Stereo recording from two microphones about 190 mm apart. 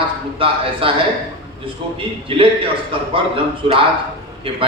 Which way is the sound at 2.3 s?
30° right (ahead or behind).